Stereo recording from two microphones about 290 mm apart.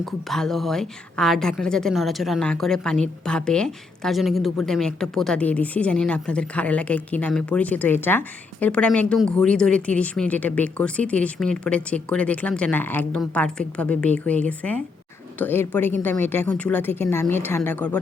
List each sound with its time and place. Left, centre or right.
0.0 s a woman's voice: centre